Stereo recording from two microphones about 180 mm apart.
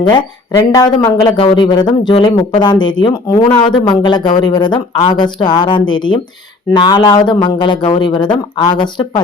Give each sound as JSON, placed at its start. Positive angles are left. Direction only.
{"t": 0.0, "sound": "speech", "side_deg": 25}